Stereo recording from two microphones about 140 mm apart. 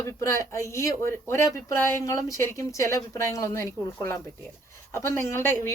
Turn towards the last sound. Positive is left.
turn(degrees=15)  # may be behind; listen again after turning